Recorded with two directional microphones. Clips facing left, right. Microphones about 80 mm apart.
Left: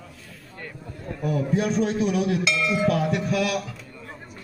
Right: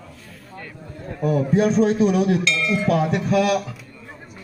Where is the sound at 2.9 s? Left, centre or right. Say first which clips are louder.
Right 3 dB; right.